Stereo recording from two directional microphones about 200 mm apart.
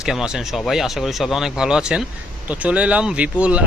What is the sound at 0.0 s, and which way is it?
Speech, centre (ahead or behind).